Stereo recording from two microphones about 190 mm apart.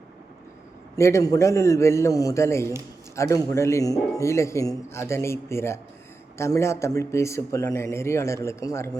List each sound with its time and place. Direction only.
0.9 s a man's voice: 15° left (ahead or behind)